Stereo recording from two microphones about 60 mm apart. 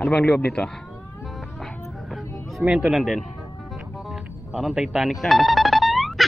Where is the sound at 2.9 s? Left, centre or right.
Centre.